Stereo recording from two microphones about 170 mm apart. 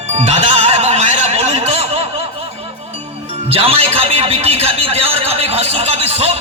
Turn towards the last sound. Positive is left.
turn(degrees=-40)  # may be behind; listen again after turning